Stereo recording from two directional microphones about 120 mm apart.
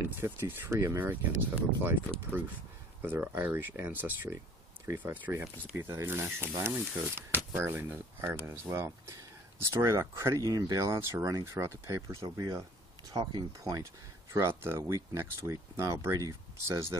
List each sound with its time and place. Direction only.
0.2 s speech: 20° right (ahead or behind)
3.0 s speech: 15° right (ahead or behind)
13.1 s speech: 40° right (ahead or behind)
14.3 s speech: 20° right (ahead or behind)